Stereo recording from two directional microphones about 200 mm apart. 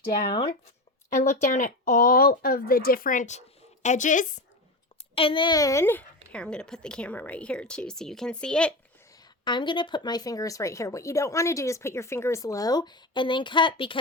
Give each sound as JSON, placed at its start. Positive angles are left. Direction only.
{"t": 1.1, "sound": "speech", "side_deg": 35}
{"t": 5.1, "sound": "a woman's voice", "side_deg": 25}
{"t": 9.4, "sound": "speech", "side_deg": 20}